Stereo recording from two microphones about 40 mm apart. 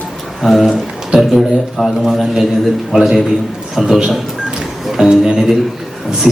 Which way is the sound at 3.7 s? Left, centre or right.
Centre.